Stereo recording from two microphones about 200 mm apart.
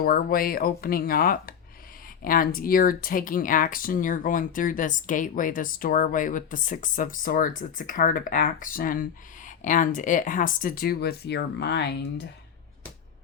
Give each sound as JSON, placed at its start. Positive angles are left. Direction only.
{"t": 0.0, "sound": "speech", "side_deg": 45}